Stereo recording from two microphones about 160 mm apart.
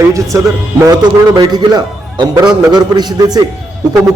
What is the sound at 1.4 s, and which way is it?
A man's voice, 25° right (ahead or behind).